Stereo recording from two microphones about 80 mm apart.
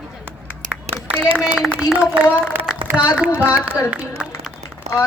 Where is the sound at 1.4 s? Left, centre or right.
Centre.